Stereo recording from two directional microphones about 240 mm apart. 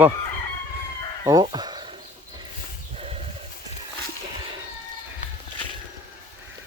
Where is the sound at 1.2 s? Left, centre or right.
Centre.